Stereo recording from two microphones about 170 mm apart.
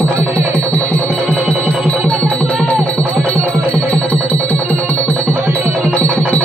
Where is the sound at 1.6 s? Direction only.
5° left (ahead or behind).